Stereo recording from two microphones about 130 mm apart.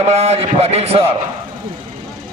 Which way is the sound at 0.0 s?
55° right (ahead or behind).